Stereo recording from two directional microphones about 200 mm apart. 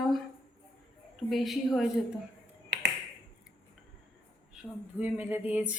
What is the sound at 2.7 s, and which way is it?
Finger snapping, 60° right (ahead or behind).